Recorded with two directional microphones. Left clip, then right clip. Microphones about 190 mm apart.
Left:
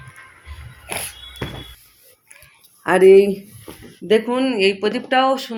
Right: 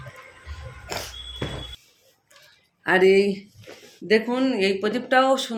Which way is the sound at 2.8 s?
15° left (ahead or behind).